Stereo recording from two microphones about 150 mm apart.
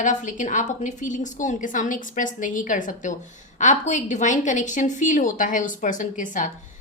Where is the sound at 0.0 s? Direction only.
55° left (ahead or behind).